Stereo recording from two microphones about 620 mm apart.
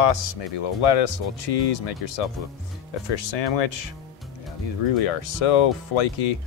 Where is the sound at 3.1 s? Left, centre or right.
Left.